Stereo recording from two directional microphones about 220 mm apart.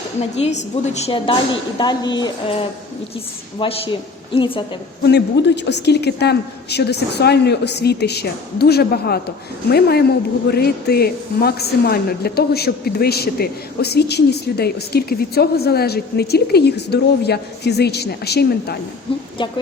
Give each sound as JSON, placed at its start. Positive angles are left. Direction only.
{"t": 0.2, "sound": "a woman's voice", "side_deg": 30}
{"t": 5.0, "sound": "a woman's voice", "side_deg": 50}